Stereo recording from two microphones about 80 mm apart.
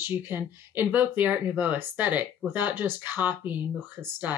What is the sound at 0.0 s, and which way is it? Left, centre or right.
Speech, right.